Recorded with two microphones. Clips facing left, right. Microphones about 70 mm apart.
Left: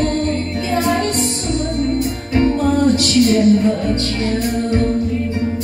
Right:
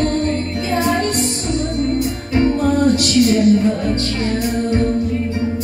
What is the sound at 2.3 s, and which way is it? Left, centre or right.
Music, right.